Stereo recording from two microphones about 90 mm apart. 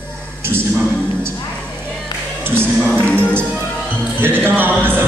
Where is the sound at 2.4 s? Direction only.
25° right (ahead or behind).